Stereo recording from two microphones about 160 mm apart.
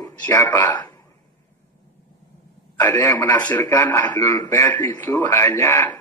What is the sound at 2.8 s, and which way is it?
A man's voice, 20° left (ahead or behind).